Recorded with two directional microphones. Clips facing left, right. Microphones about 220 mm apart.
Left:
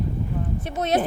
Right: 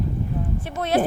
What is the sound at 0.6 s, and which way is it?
Speech, 20° left (ahead or behind).